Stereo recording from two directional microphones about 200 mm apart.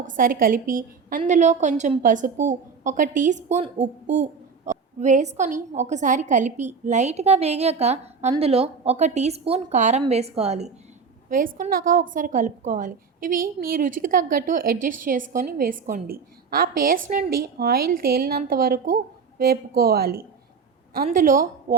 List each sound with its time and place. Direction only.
0.0 s a woman's voice: 45° right (ahead or behind)
11.3 s a woman's voice: 45° right (ahead or behind)